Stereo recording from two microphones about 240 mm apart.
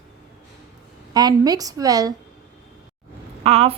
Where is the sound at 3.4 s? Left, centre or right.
Right.